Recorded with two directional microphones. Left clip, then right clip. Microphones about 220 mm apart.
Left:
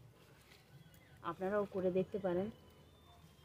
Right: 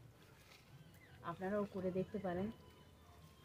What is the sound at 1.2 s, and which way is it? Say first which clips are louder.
Speech: left 4 dB; 55° left (ahead or behind).